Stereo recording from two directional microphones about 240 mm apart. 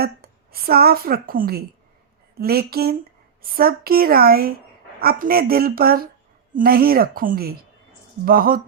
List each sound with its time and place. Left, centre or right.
0.0 s a woman's voice: right